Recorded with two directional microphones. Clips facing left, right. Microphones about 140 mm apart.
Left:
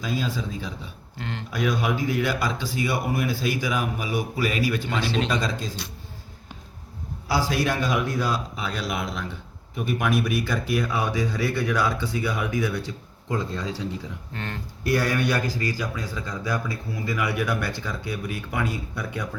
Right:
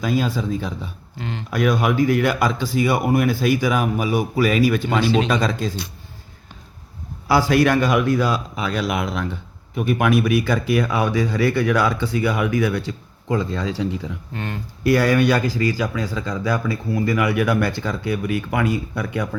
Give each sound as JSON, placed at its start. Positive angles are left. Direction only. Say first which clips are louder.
{"t": 0.0, "sound": "a man's voice", "louder": "right 7 dB", "side_deg": -60}
{"t": 7.3, "sound": "a man's voice", "louder": "right 8 dB", "side_deg": -65}
{"t": 14.3, "sound": "speech", "louder": "right 4 dB", "side_deg": -15}
{"t": 14.8, "sound": "a man's voice", "louder": "right 7 dB", "side_deg": -90}